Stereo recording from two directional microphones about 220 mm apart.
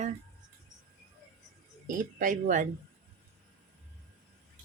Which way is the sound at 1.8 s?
35° right (ahead or behind).